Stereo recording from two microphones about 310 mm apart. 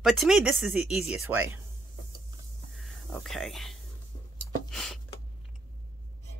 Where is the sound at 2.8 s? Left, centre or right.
Centre.